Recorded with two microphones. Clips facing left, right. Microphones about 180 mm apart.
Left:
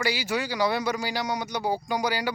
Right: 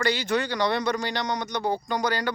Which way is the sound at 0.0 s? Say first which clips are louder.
Right 3 dB; 10° left (ahead or behind).